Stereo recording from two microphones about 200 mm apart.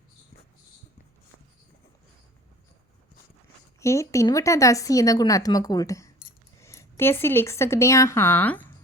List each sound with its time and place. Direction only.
3.8 s a woman's voice: 15° left (ahead or behind)